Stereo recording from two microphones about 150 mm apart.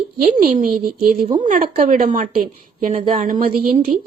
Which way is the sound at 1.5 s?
65° right (ahead or behind).